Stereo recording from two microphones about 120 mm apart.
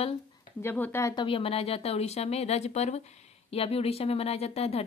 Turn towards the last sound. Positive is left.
turn(degrees=60)  # may be behind; listen again after turning